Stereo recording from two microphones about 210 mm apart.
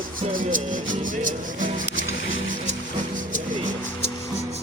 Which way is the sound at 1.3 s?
40° right (ahead or behind).